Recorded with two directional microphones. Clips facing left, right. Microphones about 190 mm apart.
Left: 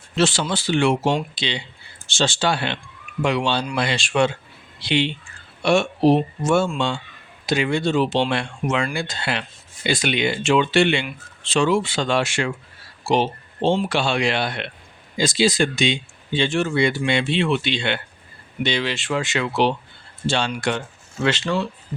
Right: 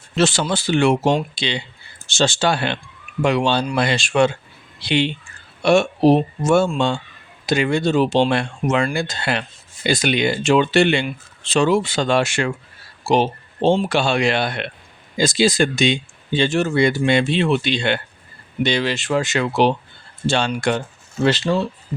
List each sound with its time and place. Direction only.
0.2 s speech: 45° right (ahead or behind)